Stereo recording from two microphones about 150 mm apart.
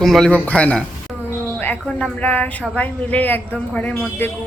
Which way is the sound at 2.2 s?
10° left (ahead or behind).